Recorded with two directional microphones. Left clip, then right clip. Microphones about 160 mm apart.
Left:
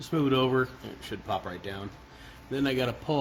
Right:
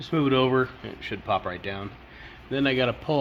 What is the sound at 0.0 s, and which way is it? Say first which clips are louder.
Speech: right 3 dB; 15° right (ahead or behind).